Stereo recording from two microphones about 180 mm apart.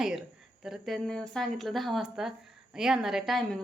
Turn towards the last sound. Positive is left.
turn(degrees=0)  # may be behind; listen again after turning